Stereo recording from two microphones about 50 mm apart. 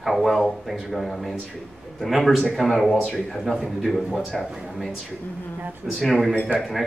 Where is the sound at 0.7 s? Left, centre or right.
Centre.